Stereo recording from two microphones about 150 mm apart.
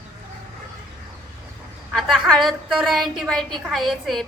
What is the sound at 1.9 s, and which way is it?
A woman's voice, centre (ahead or behind).